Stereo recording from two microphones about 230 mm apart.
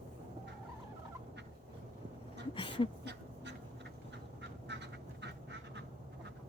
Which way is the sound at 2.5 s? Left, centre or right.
Left.